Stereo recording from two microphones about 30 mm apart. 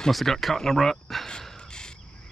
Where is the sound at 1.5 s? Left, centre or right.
Left.